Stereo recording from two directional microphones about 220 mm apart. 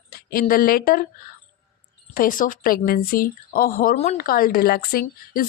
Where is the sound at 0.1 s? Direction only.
40° left (ahead or behind).